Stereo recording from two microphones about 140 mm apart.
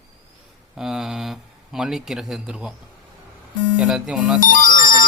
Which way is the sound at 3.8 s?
5° right (ahead or behind).